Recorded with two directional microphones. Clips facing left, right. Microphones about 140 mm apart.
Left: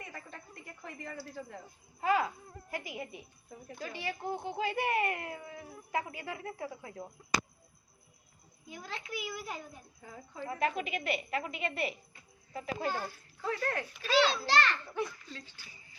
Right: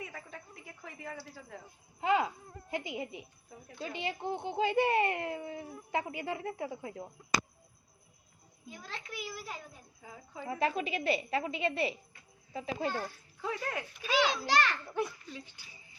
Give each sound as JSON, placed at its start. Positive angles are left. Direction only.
{"t": 0.0, "sound": "a sound", "side_deg": -5}
{"t": 2.0, "sound": "a child's voice", "side_deg": -20}
{"t": 8.7, "sound": "a child's voice", "side_deg": 0}
{"t": 10.5, "sound": "a woman's voice", "side_deg": -30}
{"t": 13.4, "sound": "a child's voice", "side_deg": -10}